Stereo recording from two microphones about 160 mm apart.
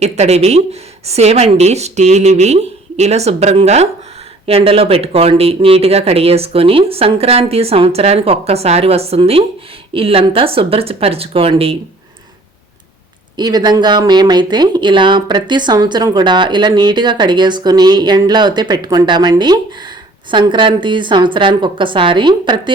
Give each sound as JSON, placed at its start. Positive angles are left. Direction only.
{"t": 0.0, "sound": "speech", "side_deg": -40}
{"t": 13.3, "sound": "speech", "side_deg": -25}